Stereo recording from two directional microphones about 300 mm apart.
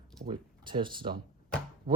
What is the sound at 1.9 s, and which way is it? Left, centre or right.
Speech, right.